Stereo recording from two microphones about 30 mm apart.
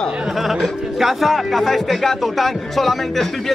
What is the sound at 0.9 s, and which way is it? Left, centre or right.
Speech, centre.